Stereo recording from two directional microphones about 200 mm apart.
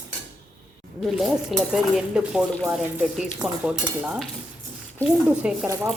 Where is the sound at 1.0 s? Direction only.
Centre (ahead or behind).